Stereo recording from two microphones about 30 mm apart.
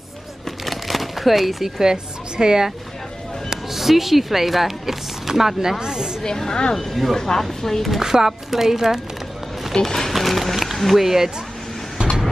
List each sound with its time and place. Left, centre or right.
0.5 s a sound: centre
1.8 s a woman's voice: right
3.4 s speech: centre
5.8 s a woman's voice: right
6.2 s speech: left
6.7 s speech: centre
8.0 s speech: centre
9.8 s speech: centre
10.1 s a sound: centre
11.0 s speech: centre